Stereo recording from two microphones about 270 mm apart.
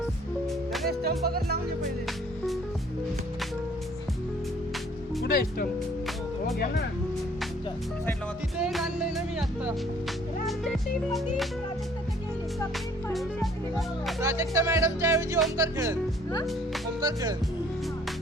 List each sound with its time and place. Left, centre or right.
1.2 s music: right
5.2 s speech: left
8.5 s music: centre
10.4 s speech: centre
13.1 s speech: centre
14.2 s speech: centre
17.0 s speech: centre